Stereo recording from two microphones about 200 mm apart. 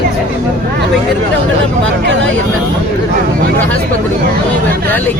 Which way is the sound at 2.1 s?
65° right (ahead or behind).